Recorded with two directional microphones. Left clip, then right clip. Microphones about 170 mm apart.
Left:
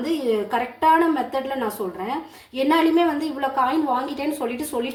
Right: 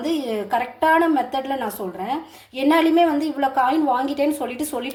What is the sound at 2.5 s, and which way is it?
A woman's voice, 35° right (ahead or behind).